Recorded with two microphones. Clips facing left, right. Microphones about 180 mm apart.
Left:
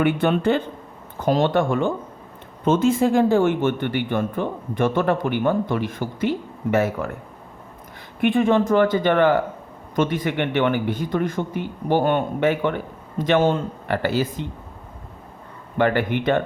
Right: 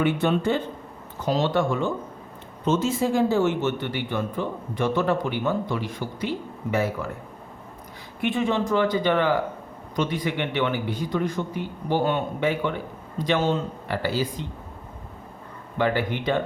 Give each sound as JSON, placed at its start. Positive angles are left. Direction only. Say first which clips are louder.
{"t": 0.0, "sound": "a man's voice", "louder": "left 3 dB", "side_deg": 60}
{"t": 8.2, "sound": "a man's voice", "louder": "left 6 dB", "side_deg": 55}
{"t": 15.8, "sound": "speech", "louder": "left 4 dB", "side_deg": 55}